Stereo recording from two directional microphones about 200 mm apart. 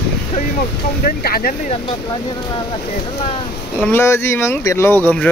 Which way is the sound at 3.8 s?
10° left (ahead or behind).